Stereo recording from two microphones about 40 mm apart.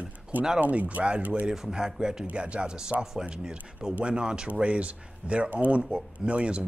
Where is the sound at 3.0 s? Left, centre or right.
Centre.